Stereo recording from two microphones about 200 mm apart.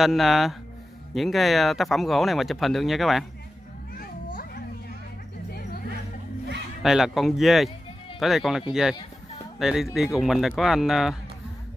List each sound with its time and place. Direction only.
0.0 s speech: centre (ahead or behind)
5.5 s a sound: 50° left (ahead or behind)
6.8 s speech: centre (ahead or behind)